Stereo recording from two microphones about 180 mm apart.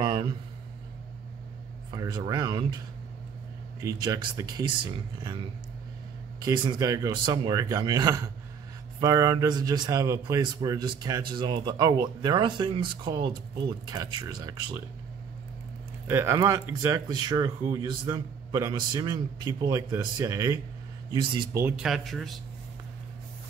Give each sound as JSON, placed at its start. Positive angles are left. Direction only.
{"t": 0.0, "sound": "a sound", "side_deg": -25}
{"t": 1.9, "sound": "speech", "side_deg": -25}
{"t": 3.8, "sound": "speech", "side_deg": -20}
{"t": 6.4, "sound": "speech", "side_deg": -25}
{"t": 16.1, "sound": "speech", "side_deg": -15}
{"t": 21.5, "sound": "speech", "side_deg": -10}